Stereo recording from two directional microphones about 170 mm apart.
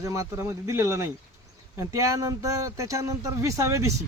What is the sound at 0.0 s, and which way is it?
Speech, 20° right (ahead or behind).